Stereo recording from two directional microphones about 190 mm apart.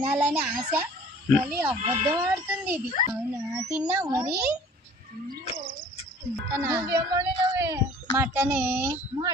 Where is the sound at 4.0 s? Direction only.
20° right (ahead or behind).